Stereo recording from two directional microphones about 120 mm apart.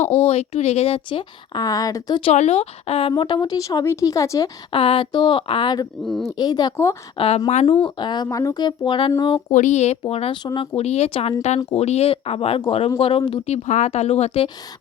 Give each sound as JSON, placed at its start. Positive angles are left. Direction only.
{"t": 0.3, "sound": "speech", "side_deg": 60}
{"t": 1.5, "sound": "a woman's voice", "side_deg": 30}
{"t": 2.3, "sound": "a woman's voice", "side_deg": 70}
{"t": 4.7, "sound": "speech", "side_deg": 45}
{"t": 6.1, "sound": "a woman's voice", "side_deg": 5}
{"t": 6.3, "sound": "a woman's voice", "side_deg": 35}
{"t": 7.2, "sound": "speech", "side_deg": 60}
{"t": 7.9, "sound": "a woman's voice", "side_deg": 40}
{"t": 9.5, "sound": "speech", "side_deg": 90}
{"t": 10.1, "sound": "speech", "side_deg": 55}
{"t": 10.4, "sound": "a woman's voice", "side_deg": 40}
{"t": 10.8, "sound": "speech", "side_deg": 60}